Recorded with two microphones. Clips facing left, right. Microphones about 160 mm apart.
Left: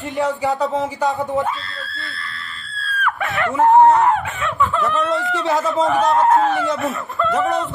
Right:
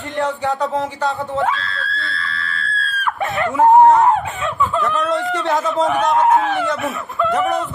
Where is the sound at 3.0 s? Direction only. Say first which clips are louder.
Even; 35° right (ahead or behind).